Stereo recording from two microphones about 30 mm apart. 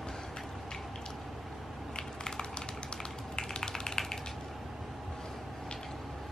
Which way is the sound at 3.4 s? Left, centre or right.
Centre.